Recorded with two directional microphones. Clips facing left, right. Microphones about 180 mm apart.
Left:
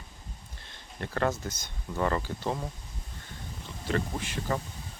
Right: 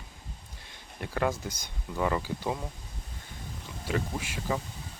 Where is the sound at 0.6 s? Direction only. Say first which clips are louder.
Left 1 dB; 10° right (ahead or behind).